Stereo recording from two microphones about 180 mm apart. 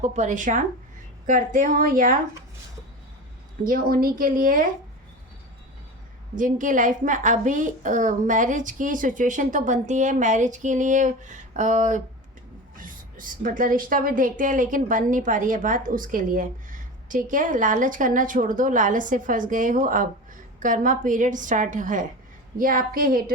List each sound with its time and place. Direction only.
0.0 s a woman's voice: 40° right (ahead or behind)
3.6 s a woman's voice: 50° right (ahead or behind)
6.3 s a woman's voice: 45° right (ahead or behind)